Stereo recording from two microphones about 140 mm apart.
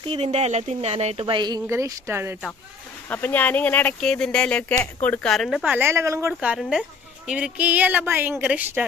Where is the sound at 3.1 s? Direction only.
15° left (ahead or behind); by 5.7 s centre (ahead or behind).